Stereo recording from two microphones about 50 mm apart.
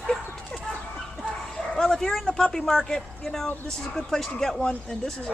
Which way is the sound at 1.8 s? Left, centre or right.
Centre.